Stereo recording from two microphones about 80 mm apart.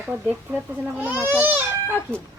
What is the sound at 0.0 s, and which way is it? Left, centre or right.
Speech, right.